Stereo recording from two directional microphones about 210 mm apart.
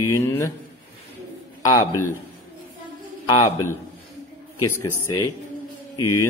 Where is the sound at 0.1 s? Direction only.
10° left (ahead or behind).